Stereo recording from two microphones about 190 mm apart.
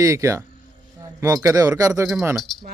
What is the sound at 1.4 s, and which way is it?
Speech, 15° right (ahead or behind).